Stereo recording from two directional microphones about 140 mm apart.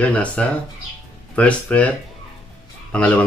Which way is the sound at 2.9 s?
10° left (ahead or behind).